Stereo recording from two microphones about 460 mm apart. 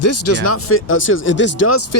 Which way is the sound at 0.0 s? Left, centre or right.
Left.